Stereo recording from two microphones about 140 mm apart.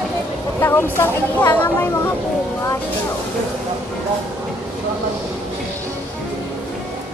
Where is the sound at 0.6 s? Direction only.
15° left (ahead or behind).